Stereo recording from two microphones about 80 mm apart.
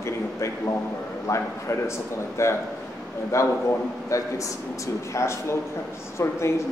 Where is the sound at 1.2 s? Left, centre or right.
Left.